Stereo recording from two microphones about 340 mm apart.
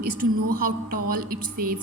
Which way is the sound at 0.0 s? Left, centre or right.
Right.